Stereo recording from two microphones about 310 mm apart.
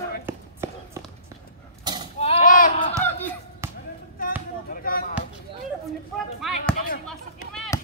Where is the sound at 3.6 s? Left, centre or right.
Centre.